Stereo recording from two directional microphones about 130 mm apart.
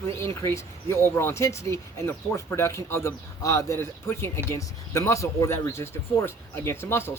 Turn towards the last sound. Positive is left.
turn(degrees=20)  # may be behind; listen again after turning